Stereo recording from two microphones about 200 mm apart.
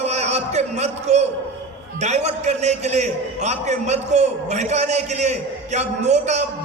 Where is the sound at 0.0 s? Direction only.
35° right (ahead or behind).